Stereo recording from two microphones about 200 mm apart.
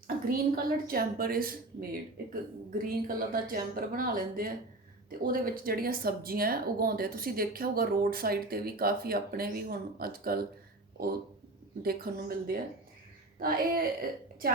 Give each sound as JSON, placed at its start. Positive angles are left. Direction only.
{"t": 0.3, "sound": "speech", "side_deg": -45}
{"t": 11.8, "sound": "speech", "side_deg": -50}